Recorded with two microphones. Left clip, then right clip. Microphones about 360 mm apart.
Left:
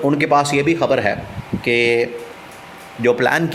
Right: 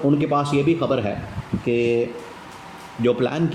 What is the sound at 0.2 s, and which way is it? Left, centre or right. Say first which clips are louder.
Speech: left 6 dB; centre.